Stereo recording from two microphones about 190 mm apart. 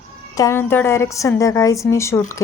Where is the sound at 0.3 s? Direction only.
15° left (ahead or behind).